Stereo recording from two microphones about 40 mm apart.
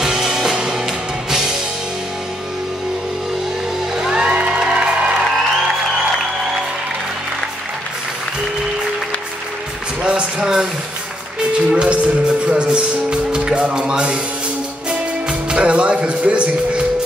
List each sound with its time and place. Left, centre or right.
0.0 s music: centre
4.2 s music: right
10.0 s a sound: centre
11.5 s music: right